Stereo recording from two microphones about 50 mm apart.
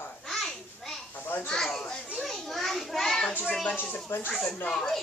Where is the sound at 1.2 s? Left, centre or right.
Left.